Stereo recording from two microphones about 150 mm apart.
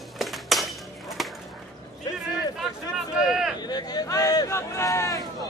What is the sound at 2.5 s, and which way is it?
Speech, centre (ahead or behind).